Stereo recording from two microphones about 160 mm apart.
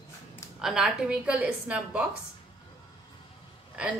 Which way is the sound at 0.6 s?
Centre (ahead or behind).